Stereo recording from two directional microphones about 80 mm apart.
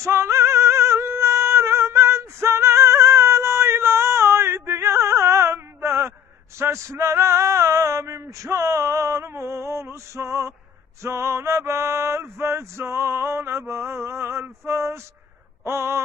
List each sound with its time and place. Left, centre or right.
0.0 s female singing: right
6.6 s male singing: right